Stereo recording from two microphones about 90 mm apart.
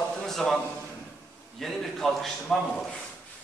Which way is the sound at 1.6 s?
5° left (ahead or behind).